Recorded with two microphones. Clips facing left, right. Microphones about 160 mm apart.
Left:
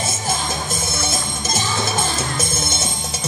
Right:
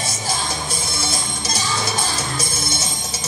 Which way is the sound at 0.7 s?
45° left (ahead or behind).